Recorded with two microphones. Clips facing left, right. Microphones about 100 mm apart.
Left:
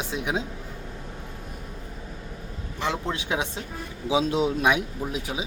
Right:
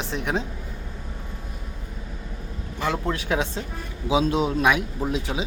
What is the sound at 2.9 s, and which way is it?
A man's voice, 20° left (ahead or behind).